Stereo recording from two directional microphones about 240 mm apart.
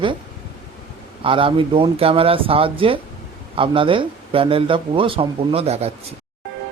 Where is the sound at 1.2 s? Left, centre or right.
Right.